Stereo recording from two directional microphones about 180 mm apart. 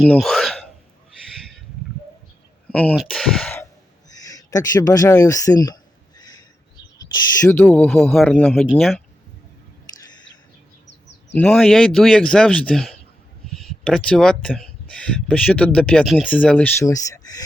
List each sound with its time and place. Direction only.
0.0 s speech: centre (ahead or behind)
2.9 s speech: centre (ahead or behind)
4.2 s a sound: 20° left (ahead or behind)
7.1 s speech: 15° left (ahead or behind)
11.3 s speech: 5° left (ahead or behind)